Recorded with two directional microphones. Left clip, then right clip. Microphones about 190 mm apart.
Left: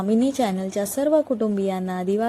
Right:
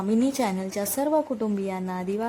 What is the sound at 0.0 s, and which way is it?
A woman's voice, 10° left (ahead or behind).